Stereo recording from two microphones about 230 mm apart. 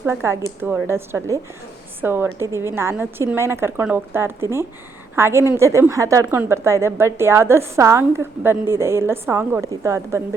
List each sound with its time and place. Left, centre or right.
0.0 s a woman's voice: centre